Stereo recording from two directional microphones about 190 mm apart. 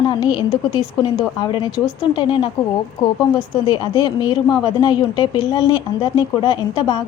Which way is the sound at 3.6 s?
20° left (ahead or behind).